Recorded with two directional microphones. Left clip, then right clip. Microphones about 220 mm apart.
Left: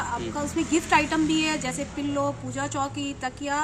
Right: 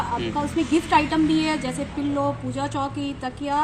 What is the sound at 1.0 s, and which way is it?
Speech, 30° left (ahead or behind).